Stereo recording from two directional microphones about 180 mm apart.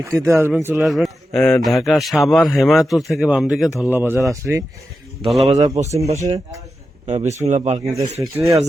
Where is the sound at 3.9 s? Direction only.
10° right (ahead or behind).